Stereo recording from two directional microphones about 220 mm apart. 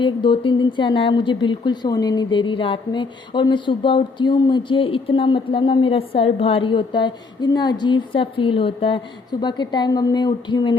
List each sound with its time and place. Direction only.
0.0 s a woman's voice: 20° left (ahead or behind)